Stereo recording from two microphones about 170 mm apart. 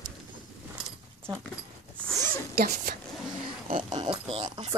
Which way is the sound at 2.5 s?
60° right (ahead or behind).